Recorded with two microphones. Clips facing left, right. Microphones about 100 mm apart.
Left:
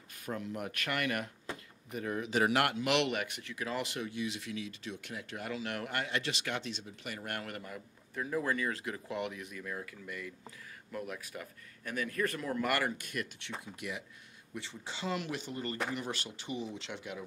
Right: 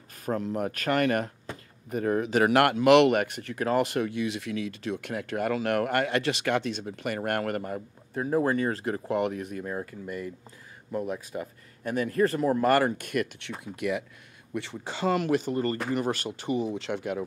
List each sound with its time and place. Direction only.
0.2 s speech: 40° right (ahead or behind)
13.0 s speech: 65° right (ahead or behind)